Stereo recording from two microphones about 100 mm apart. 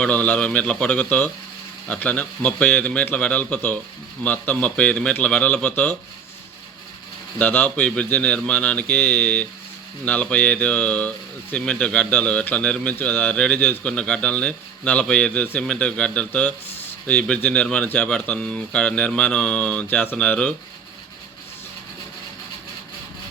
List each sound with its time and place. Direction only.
0.0 s a man's voice: 15° left (ahead or behind)
7.3 s a man's voice: 20° left (ahead or behind)